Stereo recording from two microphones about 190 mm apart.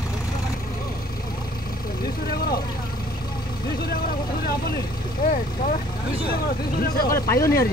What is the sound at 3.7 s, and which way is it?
Vehicle, 55° left (ahead or behind).